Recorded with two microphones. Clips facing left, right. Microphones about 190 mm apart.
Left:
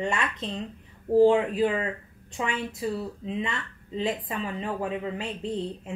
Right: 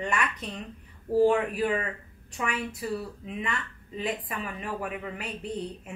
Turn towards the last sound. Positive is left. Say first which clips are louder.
# left 3 dB
turn(degrees=25)  # may be behind; listen again after turning